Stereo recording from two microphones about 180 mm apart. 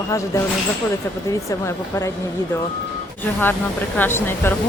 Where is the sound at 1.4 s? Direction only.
15° left (ahead or behind).